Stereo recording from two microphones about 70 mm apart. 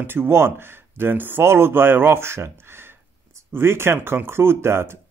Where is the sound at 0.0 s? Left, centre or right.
Right.